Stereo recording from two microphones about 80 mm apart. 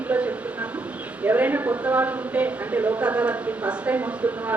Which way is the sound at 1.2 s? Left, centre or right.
Right.